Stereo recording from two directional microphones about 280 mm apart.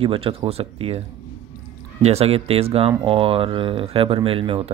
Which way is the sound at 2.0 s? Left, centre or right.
Right.